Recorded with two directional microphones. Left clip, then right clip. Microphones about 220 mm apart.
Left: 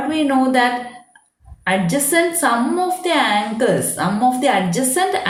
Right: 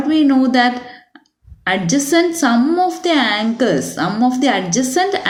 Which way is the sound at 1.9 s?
50° right (ahead or behind).